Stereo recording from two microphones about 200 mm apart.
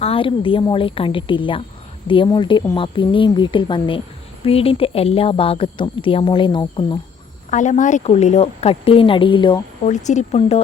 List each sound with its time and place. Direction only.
0.0 s speech: 25° left (ahead or behind)
7.5 s speech: 35° left (ahead or behind)
9.8 s speech: 35° left (ahead or behind)